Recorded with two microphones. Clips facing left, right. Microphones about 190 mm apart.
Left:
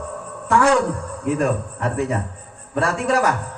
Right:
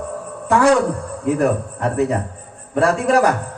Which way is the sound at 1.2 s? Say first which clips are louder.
Right 3 dB; 35° right (ahead or behind).